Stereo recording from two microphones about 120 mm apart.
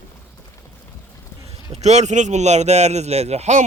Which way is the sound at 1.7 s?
70° right (ahead or behind).